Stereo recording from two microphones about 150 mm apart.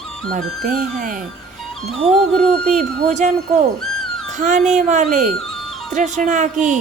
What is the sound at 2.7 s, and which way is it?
Speech, 50° right (ahead or behind).